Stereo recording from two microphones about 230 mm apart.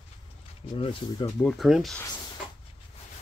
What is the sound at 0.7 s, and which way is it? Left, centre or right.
Speech, left.